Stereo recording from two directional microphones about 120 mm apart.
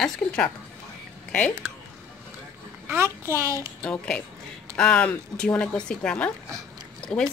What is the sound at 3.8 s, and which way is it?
Speech, 10° left (ahead or behind).